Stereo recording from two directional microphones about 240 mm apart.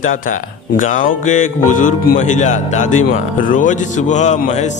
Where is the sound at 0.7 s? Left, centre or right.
Left.